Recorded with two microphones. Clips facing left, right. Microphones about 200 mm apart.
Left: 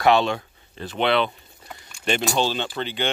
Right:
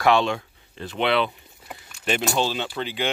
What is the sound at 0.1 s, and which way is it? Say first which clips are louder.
Speech: left 1 dB; 35° left (ahead or behind).